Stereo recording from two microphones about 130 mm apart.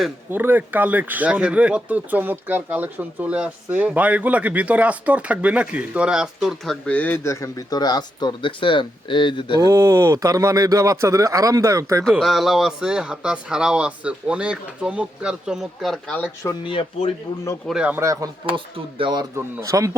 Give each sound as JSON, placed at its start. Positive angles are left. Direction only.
{"t": 0.3, "sound": "speech", "side_deg": -15}
{"t": 6.8, "sound": "speech", "side_deg": 10}
{"t": 9.6, "sound": "a man's voice", "side_deg": -25}
{"t": 12.1, "sound": "speech", "side_deg": 0}
{"t": 16.6, "sound": "speech", "side_deg": 40}
{"t": 17.7, "sound": "speech", "side_deg": -5}
{"t": 17.9, "sound": "a man's voice", "side_deg": -25}
{"t": 18.4, "sound": "speech", "side_deg": -40}
{"t": 19.4, "sound": "a man's voice", "side_deg": -20}